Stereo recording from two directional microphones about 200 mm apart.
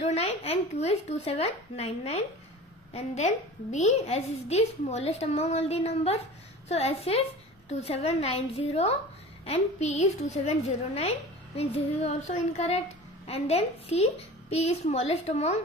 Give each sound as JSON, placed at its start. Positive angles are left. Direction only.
{"t": 0.0, "sound": "a woman's voice", "side_deg": 30}